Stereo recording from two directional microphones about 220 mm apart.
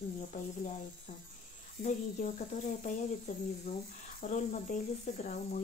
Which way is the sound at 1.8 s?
35° left (ahead or behind).